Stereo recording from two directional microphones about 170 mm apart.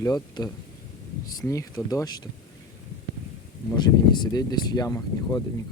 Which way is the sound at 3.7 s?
25° left (ahead or behind).